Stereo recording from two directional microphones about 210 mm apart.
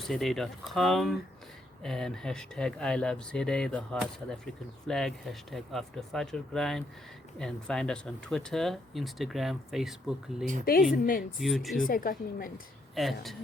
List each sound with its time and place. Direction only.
0.0 s speech: centre (ahead or behind)
10.9 s a woman's voice: 45° left (ahead or behind)
11.3 s speech: centre (ahead or behind)
11.9 s a woman's voice: 40° left (ahead or behind)
12.9 s speech: centre (ahead or behind)